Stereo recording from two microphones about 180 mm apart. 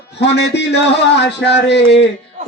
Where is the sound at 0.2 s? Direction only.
75° left (ahead or behind).